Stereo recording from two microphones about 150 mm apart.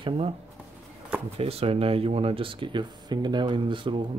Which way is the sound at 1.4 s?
40° right (ahead or behind).